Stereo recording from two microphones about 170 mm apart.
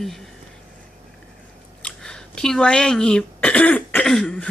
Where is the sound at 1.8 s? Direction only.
5° left (ahead or behind).